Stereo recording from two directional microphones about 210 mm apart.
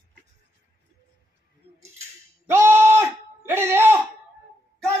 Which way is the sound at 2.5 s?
10° right (ahead or behind).